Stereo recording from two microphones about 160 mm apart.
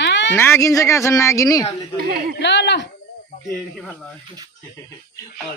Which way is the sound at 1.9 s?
75° right (ahead or behind).